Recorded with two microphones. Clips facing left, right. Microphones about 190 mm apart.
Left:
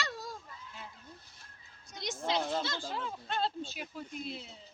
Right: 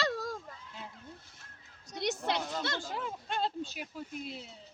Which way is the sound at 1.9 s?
65° right (ahead or behind).